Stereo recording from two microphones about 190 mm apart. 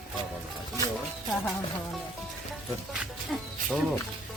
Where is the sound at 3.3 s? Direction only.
Centre (ahead or behind).